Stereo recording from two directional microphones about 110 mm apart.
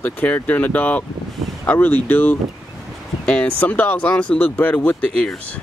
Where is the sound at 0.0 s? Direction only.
15° left (ahead or behind).